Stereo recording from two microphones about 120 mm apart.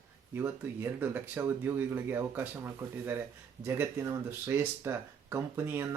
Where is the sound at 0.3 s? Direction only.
20° right (ahead or behind).